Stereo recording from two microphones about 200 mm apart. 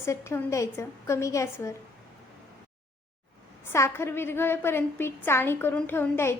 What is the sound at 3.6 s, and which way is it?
A woman's voice, 10° left (ahead or behind).